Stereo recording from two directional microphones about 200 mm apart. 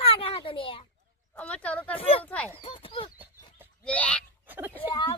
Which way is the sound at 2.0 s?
30° left (ahead or behind).